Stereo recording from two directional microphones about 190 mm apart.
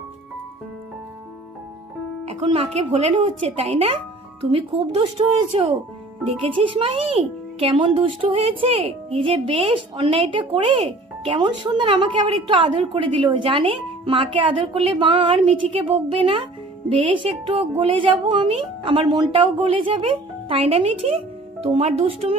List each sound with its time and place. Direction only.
2.2 s speech: 30° right (ahead or behind)